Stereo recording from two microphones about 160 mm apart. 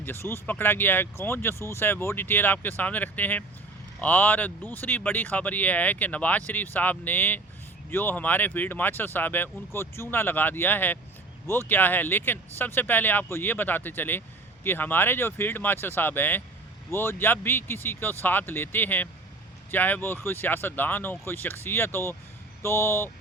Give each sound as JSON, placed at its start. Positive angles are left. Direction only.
{"t": 0.0, "sound": "speech", "side_deg": 15}